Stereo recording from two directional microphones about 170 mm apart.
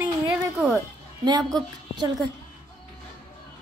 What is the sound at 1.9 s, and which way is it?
Speech, 25° right (ahead or behind).